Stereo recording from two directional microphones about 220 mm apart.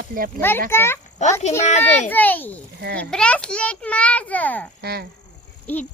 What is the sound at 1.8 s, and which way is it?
A child's voice, 10° left (ahead or behind).